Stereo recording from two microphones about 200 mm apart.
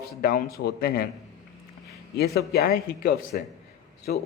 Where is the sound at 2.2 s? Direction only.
55° left (ahead or behind).